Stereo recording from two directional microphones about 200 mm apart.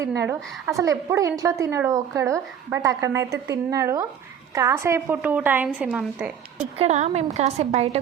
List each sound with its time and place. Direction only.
0.0 s a woman's voice: 15° right (ahead or behind)
6.7 s speech: 35° right (ahead or behind)